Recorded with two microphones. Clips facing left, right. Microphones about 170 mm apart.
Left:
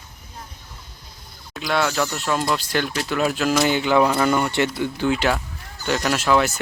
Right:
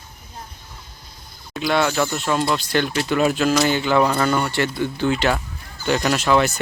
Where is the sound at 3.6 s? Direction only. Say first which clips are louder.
Left 3 dB; 15° left (ahead or behind).